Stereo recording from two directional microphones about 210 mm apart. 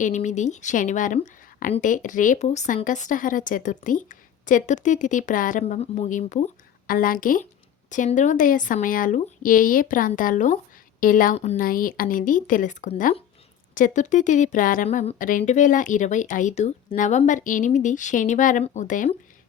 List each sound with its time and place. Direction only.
0.0 s speech: 35° left (ahead or behind)